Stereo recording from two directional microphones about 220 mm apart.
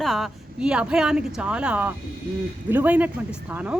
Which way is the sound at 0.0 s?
Centre (ahead or behind).